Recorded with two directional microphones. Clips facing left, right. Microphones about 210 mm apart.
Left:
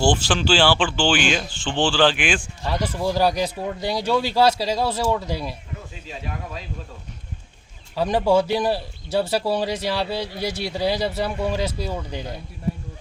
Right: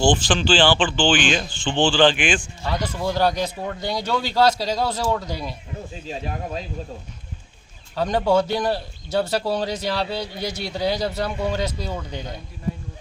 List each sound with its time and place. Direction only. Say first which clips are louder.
0.0 s speech: right 1 dB; 10° left (ahead or behind)
5.9 s speech: right 5 dB; 35° right (ahead or behind)
7.9 s speech: left 1 dB; 5° left (ahead or behind)